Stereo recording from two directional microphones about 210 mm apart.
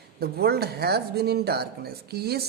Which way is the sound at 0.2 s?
50° right (ahead or behind).